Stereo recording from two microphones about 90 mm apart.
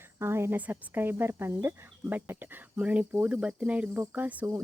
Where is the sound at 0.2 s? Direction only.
30° right (ahead or behind).